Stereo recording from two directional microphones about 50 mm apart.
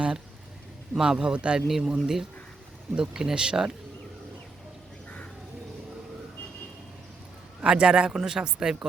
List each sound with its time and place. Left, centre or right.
0.9 s a man's voice: centre
1.6 s a man's voice: centre
7.6 s a man's voice: centre